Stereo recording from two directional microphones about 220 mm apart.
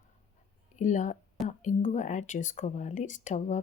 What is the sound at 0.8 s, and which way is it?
Speech, 35° left (ahead or behind).